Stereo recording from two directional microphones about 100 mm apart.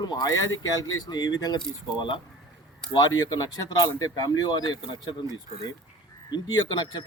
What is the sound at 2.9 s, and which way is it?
Speech, 40° left (ahead or behind).